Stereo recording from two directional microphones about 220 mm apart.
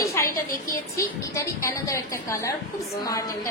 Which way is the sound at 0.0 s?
15° left (ahead or behind).